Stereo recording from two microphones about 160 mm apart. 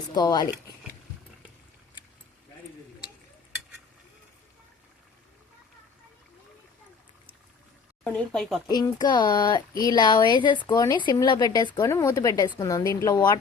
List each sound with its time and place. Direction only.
0.1 s a woman's voice: 25° left (ahead or behind)
8.0 s speech: 5° left (ahead or behind)
8.6 s a woman's voice: 25° left (ahead or behind)